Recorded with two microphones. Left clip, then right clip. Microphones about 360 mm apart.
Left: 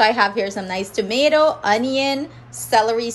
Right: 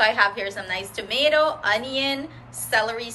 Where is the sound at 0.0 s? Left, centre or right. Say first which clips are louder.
Left 3 dB; centre.